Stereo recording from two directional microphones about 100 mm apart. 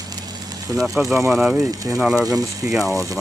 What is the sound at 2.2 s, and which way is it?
Speech, 35° right (ahead or behind).